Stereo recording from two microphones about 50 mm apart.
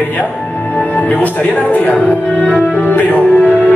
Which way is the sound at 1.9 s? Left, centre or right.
Centre.